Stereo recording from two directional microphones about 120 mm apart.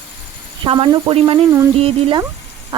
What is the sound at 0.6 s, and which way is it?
Speech, 45° right (ahead or behind).